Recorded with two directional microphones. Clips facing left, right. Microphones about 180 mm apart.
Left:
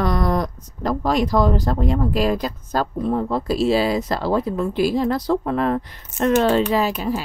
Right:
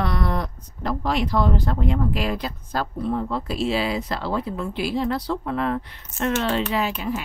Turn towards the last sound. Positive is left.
turn(degrees=35)  # may be behind; listen again after turning